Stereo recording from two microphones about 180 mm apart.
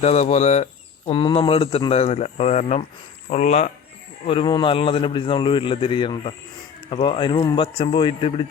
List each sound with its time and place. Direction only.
0.0 s speech: 40° left (ahead or behind)
4.3 s a man's voice: 25° left (ahead or behind)